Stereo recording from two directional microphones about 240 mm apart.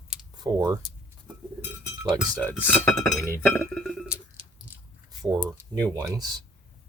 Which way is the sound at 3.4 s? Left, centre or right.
Centre.